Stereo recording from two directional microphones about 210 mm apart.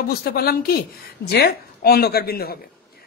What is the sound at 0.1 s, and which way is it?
A woman's voice, 45° left (ahead or behind).